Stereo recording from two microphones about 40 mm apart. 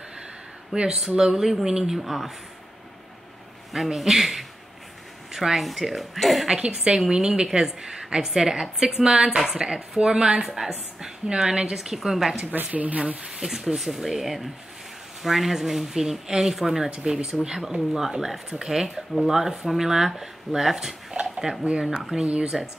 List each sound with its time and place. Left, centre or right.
0.7 s a woman's voice: right
1.1 s speech: centre
2.0 s a man's voice: centre
3.7 s a man's voice: centre
6.5 s a woman's voice: centre
12.6 s speech: right
13.4 s a man's voice: centre
22.5 s a man's voice: centre